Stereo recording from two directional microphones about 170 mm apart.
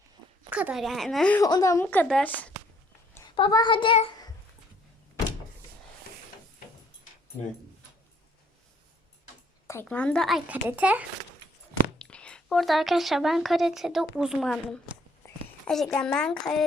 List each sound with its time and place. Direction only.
0.5 s a woman's voice: 5° right (ahead or behind)
1.4 s a woman's voice: 20° left (ahead or behind)
3.3 s child singing: 30° left (ahead or behind)
9.6 s a woman's voice: 10° left (ahead or behind); by 11.0 s 10° right (ahead or behind)
11.9 s speech: 5° left (ahead or behind)